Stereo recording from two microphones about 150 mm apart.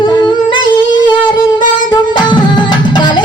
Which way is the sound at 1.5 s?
30° left (ahead or behind).